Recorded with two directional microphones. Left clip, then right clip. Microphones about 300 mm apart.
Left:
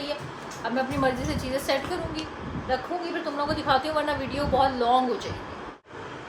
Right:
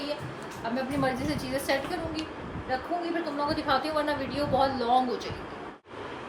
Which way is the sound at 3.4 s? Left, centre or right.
Centre.